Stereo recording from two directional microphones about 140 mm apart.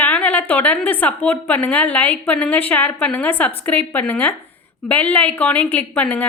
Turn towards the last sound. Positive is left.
turn(degrees=10)  # may be behind; listen again after turning